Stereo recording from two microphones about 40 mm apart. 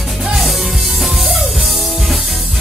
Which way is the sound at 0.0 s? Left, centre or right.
Centre.